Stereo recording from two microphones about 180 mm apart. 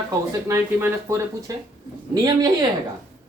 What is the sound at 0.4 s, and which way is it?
Speech, 15° right (ahead or behind).